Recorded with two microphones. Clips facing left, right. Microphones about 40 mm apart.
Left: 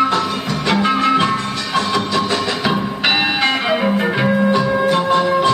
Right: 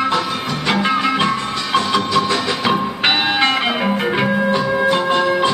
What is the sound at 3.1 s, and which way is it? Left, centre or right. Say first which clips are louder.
Church bell: left 1 dB; centre.